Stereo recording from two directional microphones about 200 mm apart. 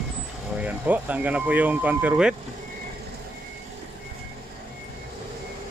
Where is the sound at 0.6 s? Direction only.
10° right (ahead or behind).